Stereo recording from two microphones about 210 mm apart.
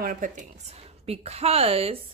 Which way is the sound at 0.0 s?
40° right (ahead or behind).